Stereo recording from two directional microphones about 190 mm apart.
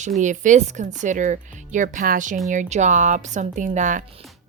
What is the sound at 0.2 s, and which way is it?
Speech, 40° right (ahead or behind).